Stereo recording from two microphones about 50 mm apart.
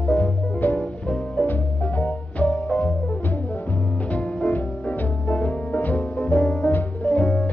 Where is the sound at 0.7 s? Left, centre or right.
Left.